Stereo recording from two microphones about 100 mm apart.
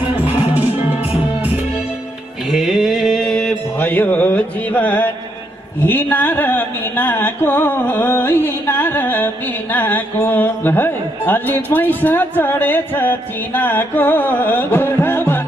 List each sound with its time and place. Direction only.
2.4 s a sound: centre (ahead or behind)
3.7 s music: 15° left (ahead or behind)
5.8 s carnatic music: 20° left (ahead or behind)